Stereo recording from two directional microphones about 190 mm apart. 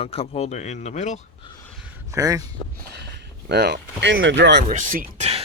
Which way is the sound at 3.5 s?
60° right (ahead or behind).